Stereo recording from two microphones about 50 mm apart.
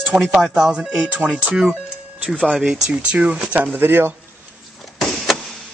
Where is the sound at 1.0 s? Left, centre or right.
Right.